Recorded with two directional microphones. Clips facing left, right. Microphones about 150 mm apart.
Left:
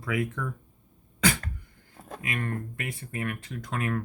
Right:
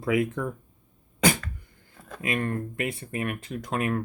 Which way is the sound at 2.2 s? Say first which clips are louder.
Right 5 dB; 30° right (ahead or behind).